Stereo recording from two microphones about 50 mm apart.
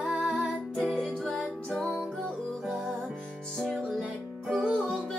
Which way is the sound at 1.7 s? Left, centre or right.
Centre.